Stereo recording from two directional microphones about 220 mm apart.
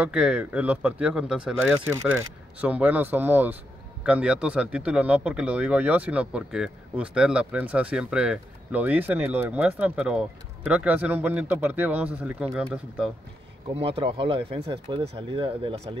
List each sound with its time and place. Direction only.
0.0 s speech: 5° right (ahead or behind)
13.7 s speech: 25° right (ahead or behind)